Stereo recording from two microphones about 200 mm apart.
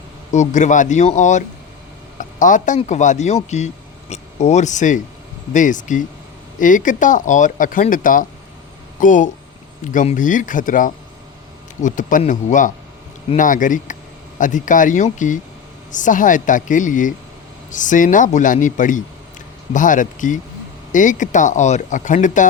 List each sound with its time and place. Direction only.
0.3 s speech: 35° left (ahead or behind)